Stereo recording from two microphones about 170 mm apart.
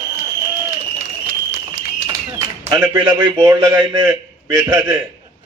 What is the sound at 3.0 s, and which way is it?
A man's voice, 25° right (ahead or behind).